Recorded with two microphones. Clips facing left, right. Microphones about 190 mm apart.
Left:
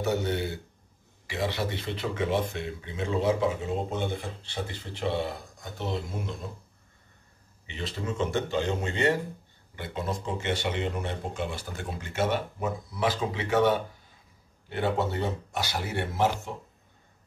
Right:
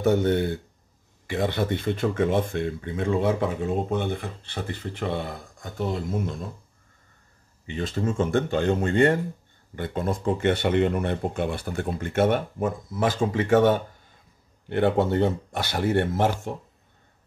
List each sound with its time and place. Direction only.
0.0 s speech: 55° right (ahead or behind)
7.6 s speech: 50° right (ahead or behind)